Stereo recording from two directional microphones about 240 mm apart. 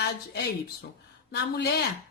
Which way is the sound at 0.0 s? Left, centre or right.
Left.